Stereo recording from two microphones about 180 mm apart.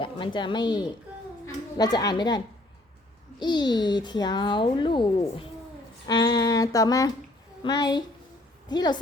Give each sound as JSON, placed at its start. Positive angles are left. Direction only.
{"t": 0.0, "sound": "speech", "side_deg": 25}
{"t": 1.8, "sound": "a child's voice", "side_deg": 20}